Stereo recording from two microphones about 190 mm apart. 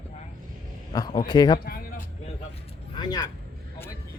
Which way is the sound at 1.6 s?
50° left (ahead or behind).